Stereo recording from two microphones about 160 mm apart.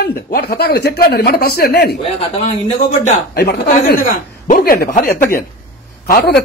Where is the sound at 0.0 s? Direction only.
70° left (ahead or behind).